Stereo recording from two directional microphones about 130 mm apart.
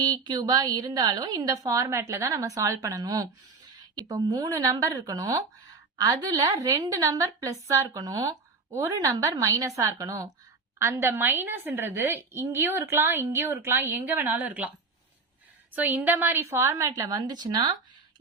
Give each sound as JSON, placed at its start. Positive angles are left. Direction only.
{"t": 0.0, "sound": "a woman's voice", "side_deg": -30}
{"t": 15.7, "sound": "a woman's voice", "side_deg": -15}